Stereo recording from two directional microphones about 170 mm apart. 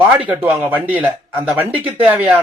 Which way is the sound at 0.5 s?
10° right (ahead or behind).